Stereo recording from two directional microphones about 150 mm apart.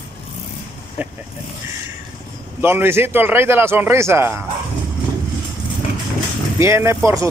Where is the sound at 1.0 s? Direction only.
10° right (ahead or behind).